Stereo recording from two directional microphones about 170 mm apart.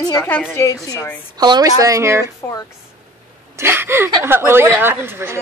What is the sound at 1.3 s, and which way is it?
Speech, 25° right (ahead or behind).